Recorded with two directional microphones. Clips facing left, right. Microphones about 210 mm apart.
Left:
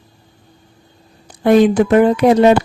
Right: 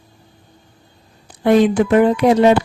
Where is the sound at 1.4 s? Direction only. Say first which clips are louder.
Left 2 dB; 45° left (ahead or behind).